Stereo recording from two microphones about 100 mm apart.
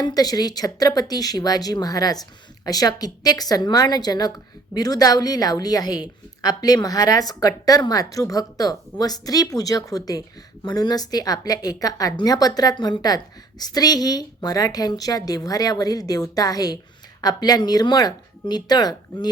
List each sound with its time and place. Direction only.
0.0 s a woman's voice: 40° left (ahead or behind)